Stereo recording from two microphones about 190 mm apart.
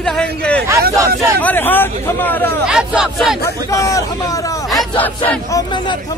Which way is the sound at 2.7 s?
5° right (ahead or behind).